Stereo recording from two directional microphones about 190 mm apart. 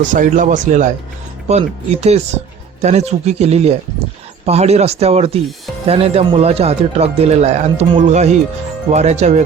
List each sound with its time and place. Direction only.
0.1 s speech: 45° right (ahead or behind)